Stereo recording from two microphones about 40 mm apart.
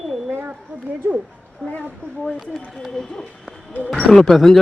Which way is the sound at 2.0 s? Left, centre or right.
Left.